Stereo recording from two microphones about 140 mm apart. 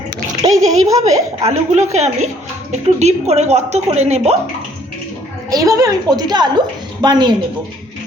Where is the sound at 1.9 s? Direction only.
50° right (ahead or behind).